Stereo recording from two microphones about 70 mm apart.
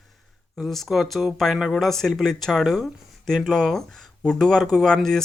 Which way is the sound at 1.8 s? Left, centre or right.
Centre.